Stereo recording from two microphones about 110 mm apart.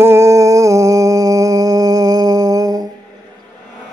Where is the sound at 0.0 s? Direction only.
25° right (ahead or behind).